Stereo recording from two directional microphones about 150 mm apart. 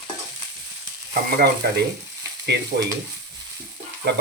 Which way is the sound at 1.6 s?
85° right.